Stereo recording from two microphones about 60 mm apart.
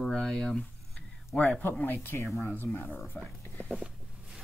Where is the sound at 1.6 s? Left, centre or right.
Left.